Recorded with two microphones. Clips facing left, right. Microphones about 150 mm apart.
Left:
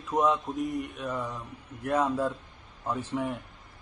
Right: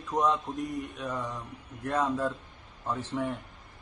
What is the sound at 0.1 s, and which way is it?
A man's voice, 5° left (ahead or behind).